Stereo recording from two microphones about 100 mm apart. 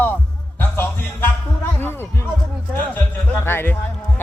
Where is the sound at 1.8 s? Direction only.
20° left (ahead or behind).